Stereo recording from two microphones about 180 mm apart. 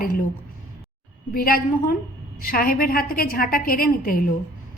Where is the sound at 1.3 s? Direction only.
55° left (ahead or behind).